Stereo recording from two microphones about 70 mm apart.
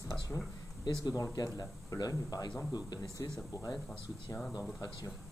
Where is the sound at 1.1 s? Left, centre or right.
Left.